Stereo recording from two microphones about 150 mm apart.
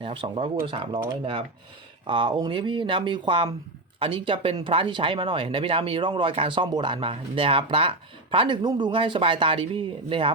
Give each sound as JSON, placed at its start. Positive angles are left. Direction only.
{"t": 0.0, "sound": "speech", "side_deg": -35}